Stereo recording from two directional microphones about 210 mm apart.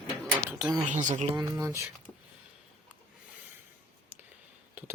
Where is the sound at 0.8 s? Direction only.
35° right (ahead or behind).